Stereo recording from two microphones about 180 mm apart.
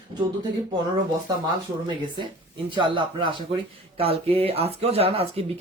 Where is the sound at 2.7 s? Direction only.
25° right (ahead or behind).